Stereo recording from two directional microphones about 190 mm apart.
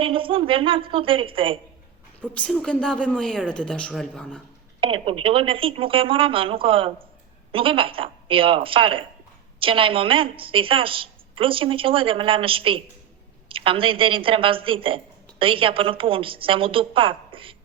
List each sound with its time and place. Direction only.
0.0 s a woman's voice: 30° right (ahead or behind)
2.2 s a woman's voice: 5° left (ahead or behind)
4.8 s a woman's voice: 30° right (ahead or behind)